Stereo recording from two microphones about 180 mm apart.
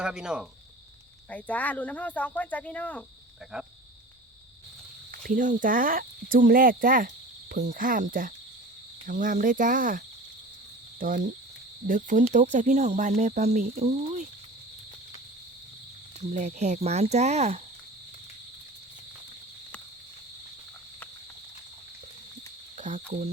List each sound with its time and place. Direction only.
0.0 s speech: 5° right (ahead or behind)
1.3 s speech: 10° left (ahead or behind)
3.5 s speech: 5° right (ahead or behind)
5.2 s speech: 45° right (ahead or behind)
11.0 s speech: 50° right (ahead or behind)
16.3 s speech: 40° right (ahead or behind)
22.8 s speech: 45° right (ahead or behind)